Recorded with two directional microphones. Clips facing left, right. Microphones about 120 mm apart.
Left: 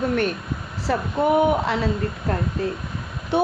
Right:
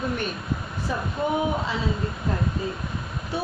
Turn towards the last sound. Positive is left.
turn(degrees=70)  # may be behind; listen again after turning